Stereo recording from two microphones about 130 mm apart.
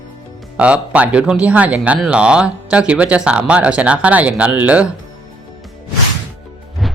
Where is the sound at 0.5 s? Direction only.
10° right (ahead or behind).